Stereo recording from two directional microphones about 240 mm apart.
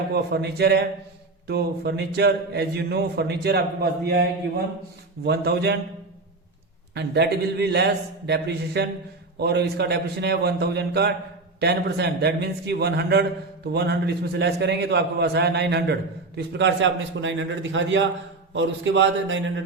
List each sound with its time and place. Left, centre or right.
0.1 s a man's voice: right
5.2 s a man's voice: right
6.9 s a man's voice: right